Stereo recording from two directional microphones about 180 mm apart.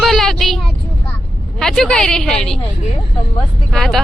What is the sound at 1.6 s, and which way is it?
Speech, 5° left (ahead or behind).